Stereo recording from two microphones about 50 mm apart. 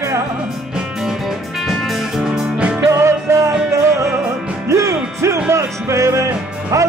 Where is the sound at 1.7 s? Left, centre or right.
Centre.